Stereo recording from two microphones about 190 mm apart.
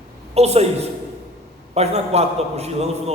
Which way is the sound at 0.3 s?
35° right (ahead or behind).